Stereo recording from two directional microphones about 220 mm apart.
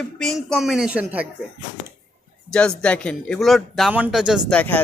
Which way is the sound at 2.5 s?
5° left (ahead or behind).